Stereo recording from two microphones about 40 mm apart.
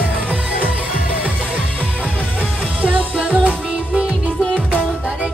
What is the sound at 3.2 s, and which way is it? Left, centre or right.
Music, right.